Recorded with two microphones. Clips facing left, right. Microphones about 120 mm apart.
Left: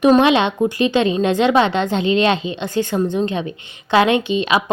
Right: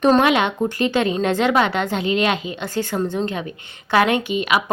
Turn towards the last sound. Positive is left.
turn(degrees=25)  # may be behind; listen again after turning